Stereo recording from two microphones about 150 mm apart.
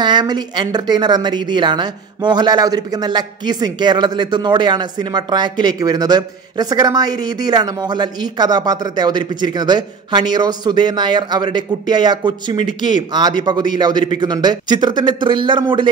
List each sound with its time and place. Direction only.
0.0 s speech: 30° right (ahead or behind)